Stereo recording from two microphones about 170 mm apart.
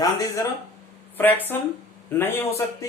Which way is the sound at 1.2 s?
10° left (ahead or behind).